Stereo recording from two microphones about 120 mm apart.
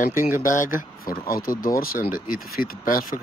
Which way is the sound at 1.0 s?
30° left (ahead or behind).